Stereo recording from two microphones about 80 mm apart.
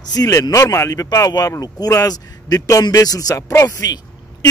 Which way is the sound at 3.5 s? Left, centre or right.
Left.